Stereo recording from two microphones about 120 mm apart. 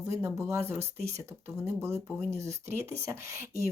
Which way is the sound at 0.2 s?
25° right (ahead or behind).